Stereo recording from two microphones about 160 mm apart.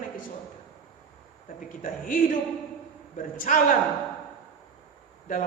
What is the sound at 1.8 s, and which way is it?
A woman's voice, 60° left (ahead or behind).